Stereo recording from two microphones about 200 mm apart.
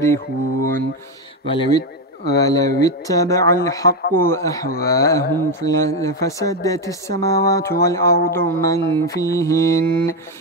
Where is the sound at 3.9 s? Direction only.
50° left (ahead or behind).